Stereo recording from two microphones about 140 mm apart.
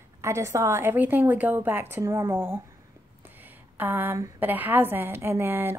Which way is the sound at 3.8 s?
15° right (ahead or behind).